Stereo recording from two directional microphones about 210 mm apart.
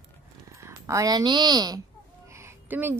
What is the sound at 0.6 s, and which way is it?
A woman's voice, 15° right (ahead or behind).